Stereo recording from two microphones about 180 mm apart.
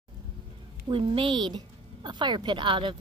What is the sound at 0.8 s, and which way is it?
A woman's voice, 30° right (ahead or behind).